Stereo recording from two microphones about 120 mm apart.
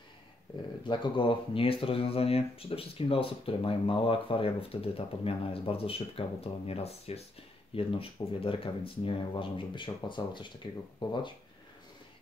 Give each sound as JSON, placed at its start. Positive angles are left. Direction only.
{"t": 0.8, "sound": "speech", "side_deg": 45}